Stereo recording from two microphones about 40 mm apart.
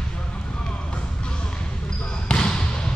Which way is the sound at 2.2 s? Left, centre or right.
Left.